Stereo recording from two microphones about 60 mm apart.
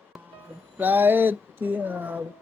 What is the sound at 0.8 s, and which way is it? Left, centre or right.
Speech, right.